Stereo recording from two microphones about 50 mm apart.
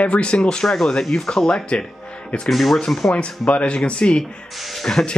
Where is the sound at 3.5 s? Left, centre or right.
Left.